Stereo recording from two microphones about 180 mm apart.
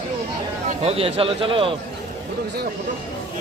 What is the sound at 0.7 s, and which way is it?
A man's voice, 35° right (ahead or behind).